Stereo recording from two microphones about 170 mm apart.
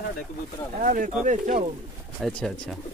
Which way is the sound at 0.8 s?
50° right (ahead or behind).